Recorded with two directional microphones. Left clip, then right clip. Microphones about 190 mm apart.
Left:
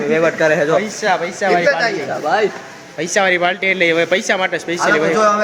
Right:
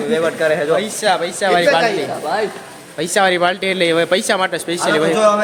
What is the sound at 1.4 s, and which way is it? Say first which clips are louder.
Speech: right 1 dB; centre (ahead or behind).